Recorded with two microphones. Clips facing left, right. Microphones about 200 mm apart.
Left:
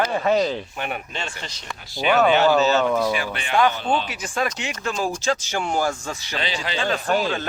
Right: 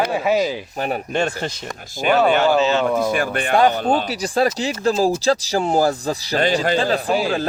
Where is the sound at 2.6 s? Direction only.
40° left (ahead or behind).